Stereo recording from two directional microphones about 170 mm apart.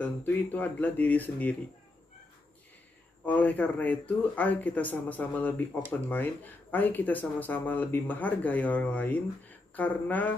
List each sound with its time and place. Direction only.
0.0 s speech: 10° left (ahead or behind)
3.3 s speech: 10° left (ahead or behind)